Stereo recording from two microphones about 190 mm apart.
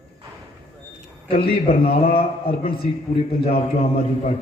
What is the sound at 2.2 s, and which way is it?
A man's voice, 30° left (ahead or behind).